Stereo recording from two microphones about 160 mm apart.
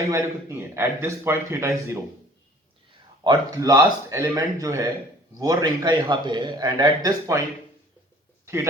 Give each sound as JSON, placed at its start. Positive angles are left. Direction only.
{"t": 0.1, "sound": "a man's voice", "side_deg": -20}
{"t": 3.2, "sound": "a man's voice", "side_deg": -25}